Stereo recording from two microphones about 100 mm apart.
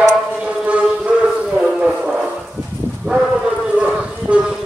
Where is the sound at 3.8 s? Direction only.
10° right (ahead or behind).